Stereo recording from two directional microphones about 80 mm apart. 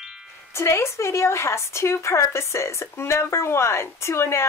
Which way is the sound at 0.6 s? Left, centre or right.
Left.